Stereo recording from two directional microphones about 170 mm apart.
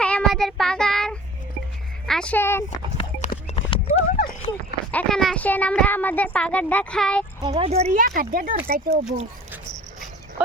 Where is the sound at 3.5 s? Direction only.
30° left (ahead or behind).